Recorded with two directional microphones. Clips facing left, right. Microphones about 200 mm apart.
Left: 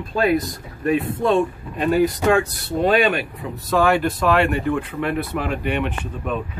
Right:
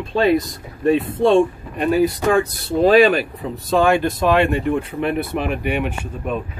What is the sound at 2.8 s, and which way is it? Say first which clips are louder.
Speech: right 5 dB; 35° right (ahead or behind).